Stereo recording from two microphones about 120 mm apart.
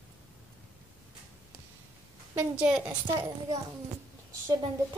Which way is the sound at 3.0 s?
30° right (ahead or behind).